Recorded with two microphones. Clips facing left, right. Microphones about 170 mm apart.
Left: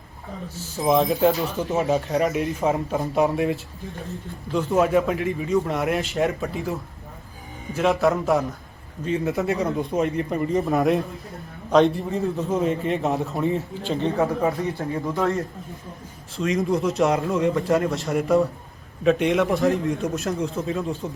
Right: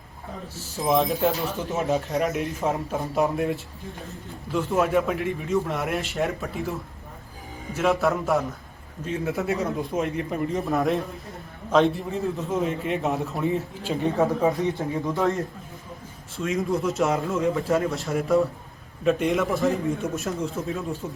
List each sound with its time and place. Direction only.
0.9 s speech: centre (ahead or behind)
15.1 s a man's voice: 15° right (ahead or behind)
16.4 s speech: centre (ahead or behind)